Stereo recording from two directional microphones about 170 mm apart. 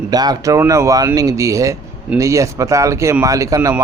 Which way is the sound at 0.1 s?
25° right (ahead or behind).